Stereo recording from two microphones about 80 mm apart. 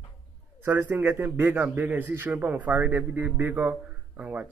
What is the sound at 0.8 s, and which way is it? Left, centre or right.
A man's voice, right.